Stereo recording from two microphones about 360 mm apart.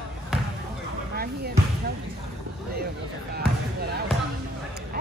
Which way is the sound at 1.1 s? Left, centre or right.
Right.